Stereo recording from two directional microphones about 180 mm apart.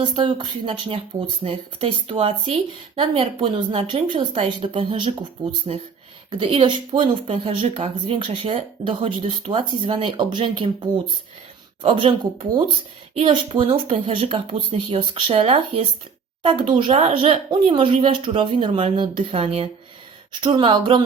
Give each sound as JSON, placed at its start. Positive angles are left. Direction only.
{"t": 0.0, "sound": "a woman's voice", "side_deg": -25}
{"t": 11.8, "sound": "a woman's voice", "side_deg": -30}